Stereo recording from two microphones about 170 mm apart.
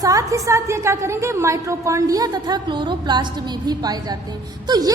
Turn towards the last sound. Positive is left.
turn(degrees=-25)  # may be behind; listen again after turning